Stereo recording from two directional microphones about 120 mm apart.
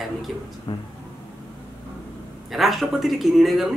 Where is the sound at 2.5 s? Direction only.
Centre (ahead or behind).